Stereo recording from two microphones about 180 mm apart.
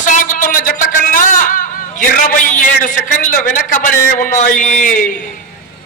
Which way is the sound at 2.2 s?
45° left (ahead or behind).